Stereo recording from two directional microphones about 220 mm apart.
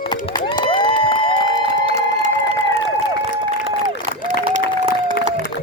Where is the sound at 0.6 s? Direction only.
20° left (ahead or behind).